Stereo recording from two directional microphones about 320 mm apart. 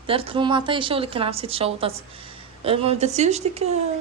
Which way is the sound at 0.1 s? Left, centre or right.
Centre.